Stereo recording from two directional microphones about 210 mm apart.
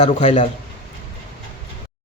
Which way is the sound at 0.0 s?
30° left (ahead or behind).